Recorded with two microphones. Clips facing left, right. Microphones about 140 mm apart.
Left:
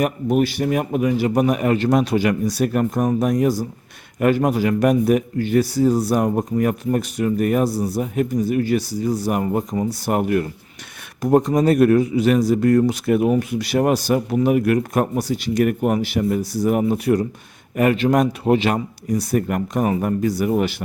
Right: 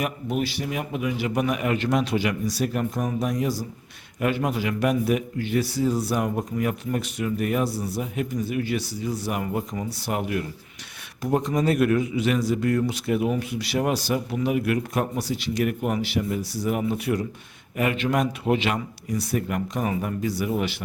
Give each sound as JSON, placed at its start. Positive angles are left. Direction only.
{"t": 0.0, "sound": "speech", "side_deg": 50}